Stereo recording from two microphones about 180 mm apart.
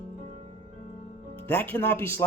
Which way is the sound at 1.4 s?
10° left (ahead or behind).